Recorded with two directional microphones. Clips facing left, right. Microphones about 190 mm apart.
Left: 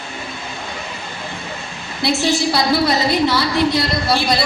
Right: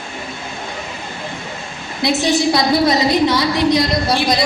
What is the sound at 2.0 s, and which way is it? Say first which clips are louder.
A woman's voice: right 2 dB; 20° right (ahead or behind).